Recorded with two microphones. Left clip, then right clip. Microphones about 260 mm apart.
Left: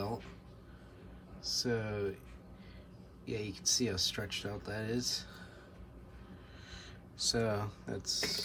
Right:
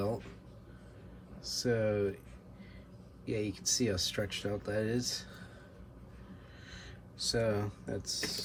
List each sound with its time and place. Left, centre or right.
1.4 s speech: centre
3.2 s speech: centre
6.7 s speech: centre